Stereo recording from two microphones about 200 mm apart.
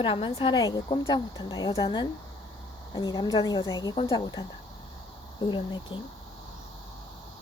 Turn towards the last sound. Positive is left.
turn(degrees=25)  # may be behind; listen again after turning